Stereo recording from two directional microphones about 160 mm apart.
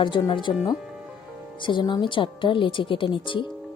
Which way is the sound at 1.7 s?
30° left (ahead or behind).